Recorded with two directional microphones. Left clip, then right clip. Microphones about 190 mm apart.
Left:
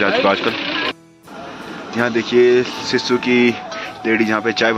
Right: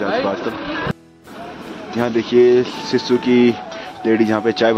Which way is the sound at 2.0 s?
15° right (ahead or behind).